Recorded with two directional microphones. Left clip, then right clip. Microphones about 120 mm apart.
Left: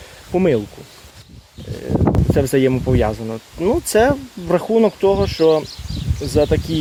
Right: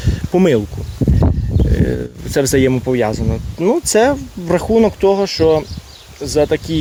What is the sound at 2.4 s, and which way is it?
Speech, 25° right (ahead or behind).